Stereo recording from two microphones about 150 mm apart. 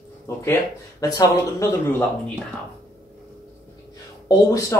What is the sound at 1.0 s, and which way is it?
Speech, 25° left (ahead or behind).